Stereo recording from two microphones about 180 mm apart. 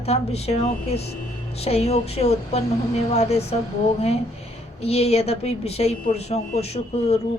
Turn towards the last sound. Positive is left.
turn(degrees=35)  # may be behind; listen again after turning